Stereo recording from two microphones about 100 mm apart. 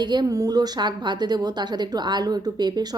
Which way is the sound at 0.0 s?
45° right (ahead or behind).